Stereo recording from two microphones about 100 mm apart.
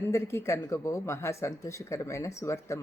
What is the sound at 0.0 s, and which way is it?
A woman's voice, 25° left (ahead or behind).